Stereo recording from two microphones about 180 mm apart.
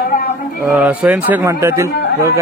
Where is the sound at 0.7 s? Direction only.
5° right (ahead or behind).